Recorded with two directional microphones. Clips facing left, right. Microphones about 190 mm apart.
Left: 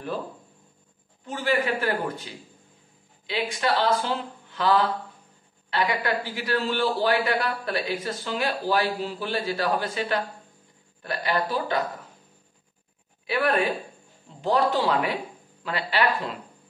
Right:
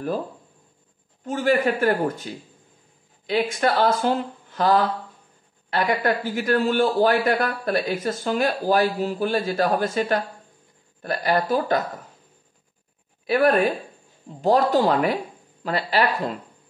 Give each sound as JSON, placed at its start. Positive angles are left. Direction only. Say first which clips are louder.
{"t": 1.2, "sound": "speech", "louder": "right 5 dB", "side_deg": -45}
{"t": 13.3, "sound": "speech", "louder": "right 5 dB", "side_deg": -45}